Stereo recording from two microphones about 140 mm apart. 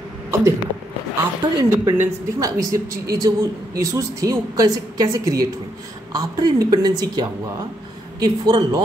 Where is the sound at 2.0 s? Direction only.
20° right (ahead or behind).